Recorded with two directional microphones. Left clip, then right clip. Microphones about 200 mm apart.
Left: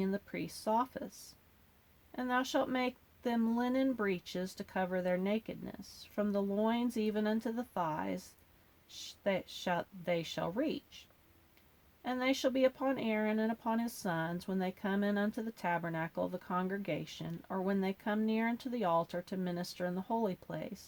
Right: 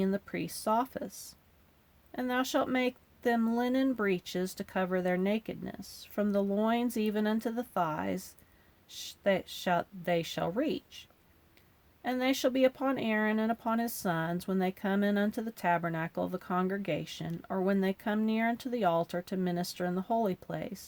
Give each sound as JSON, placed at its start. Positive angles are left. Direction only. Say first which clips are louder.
{"t": 0.0, "sound": "speech", "louder": "right 5 dB", "side_deg": -40}